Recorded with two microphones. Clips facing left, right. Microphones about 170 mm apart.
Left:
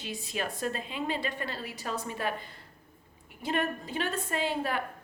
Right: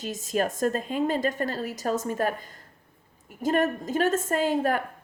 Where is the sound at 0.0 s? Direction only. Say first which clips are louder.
Right 8 dB; 45° right (ahead or behind).